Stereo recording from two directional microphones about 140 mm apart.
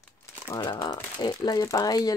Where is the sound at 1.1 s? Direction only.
30° left (ahead or behind).